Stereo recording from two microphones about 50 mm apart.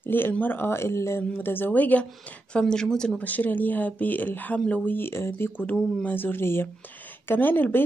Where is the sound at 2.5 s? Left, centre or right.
Centre.